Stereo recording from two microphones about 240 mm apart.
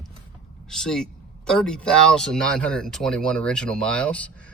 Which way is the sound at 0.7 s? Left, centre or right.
Centre.